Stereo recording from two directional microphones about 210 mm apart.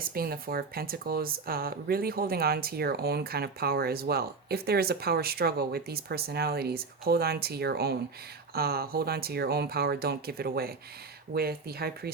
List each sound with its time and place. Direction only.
0.0 s speech: 45° right (ahead or behind)